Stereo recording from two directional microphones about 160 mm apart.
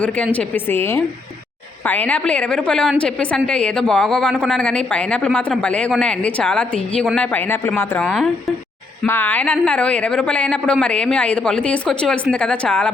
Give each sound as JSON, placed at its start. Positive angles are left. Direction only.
{"t": 0.3, "sound": "a woman's voice", "side_deg": 15}
{"t": 8.0, "sound": "speech", "side_deg": 0}
{"t": 9.0, "sound": "a woman's voice", "side_deg": 15}